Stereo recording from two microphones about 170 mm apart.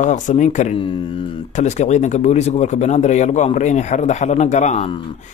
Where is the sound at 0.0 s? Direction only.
45° left (ahead or behind).